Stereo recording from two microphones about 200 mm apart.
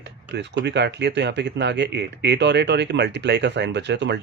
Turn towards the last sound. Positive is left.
turn(degrees=-60)  # may be behind; listen again after turning